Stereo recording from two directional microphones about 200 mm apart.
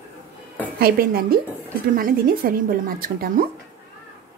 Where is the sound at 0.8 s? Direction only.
50° right (ahead or behind).